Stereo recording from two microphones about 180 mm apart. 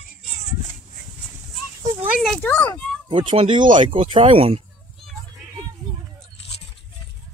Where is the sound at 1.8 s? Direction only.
20° right (ahead or behind).